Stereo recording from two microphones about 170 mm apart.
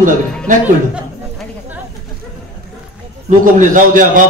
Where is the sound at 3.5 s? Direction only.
50° right (ahead or behind).